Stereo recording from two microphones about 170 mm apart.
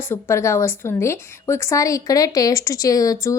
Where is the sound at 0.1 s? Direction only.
15° left (ahead or behind).